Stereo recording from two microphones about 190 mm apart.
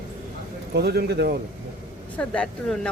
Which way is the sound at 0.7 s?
55° right (ahead or behind).